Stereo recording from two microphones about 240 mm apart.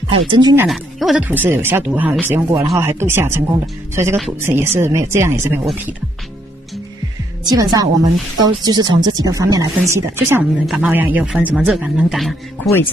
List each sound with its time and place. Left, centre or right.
0.3 s speech: centre
0.7 s speech: centre
7.4 s speech: centre